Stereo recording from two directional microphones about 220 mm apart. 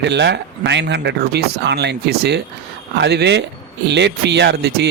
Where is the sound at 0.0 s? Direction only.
50° right (ahead or behind).